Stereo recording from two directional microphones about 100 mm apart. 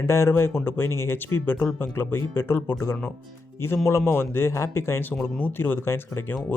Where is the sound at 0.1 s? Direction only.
25° left (ahead or behind).